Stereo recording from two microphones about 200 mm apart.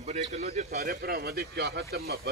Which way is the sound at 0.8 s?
50° right (ahead or behind).